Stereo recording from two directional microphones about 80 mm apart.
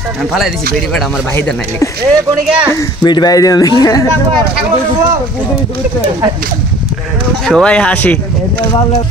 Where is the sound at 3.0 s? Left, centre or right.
Left.